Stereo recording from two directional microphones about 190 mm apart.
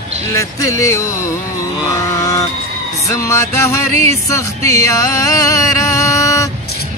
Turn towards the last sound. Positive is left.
turn(degrees=15)  # may be behind; listen again after turning